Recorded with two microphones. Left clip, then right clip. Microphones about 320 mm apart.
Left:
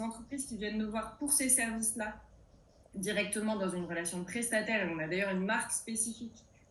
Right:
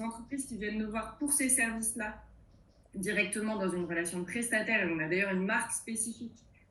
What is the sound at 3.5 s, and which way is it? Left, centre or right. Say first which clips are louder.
A woman's voice: right 3 dB; left.